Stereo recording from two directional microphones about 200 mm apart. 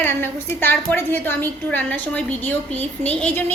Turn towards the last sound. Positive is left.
turn(degrees=5)  # may be behind; listen again after turning